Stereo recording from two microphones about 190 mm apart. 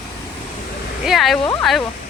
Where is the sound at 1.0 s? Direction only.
Centre (ahead or behind).